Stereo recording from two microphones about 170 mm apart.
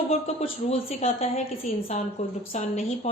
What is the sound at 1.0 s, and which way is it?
A woman's voice, 35° left (ahead or behind).